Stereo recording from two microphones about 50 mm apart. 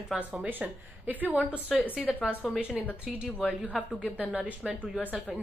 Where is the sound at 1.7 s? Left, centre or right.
Centre.